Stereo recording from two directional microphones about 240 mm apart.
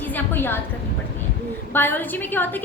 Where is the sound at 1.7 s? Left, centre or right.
Centre.